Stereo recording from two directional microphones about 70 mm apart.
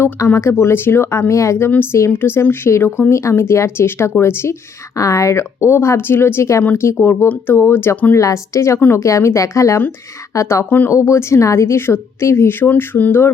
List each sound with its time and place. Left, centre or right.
0.3 s a woman's voice: left
4.9 s a woman's voice: left